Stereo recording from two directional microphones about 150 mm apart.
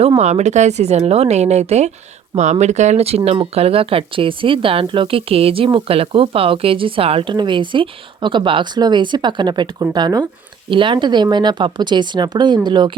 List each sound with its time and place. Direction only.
0.2 s speech: 45° right (ahead or behind); by 12.9 s 30° right (ahead or behind)